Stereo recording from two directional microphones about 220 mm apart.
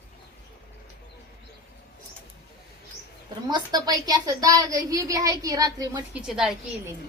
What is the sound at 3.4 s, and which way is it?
A woman's voice, 20° right (ahead or behind).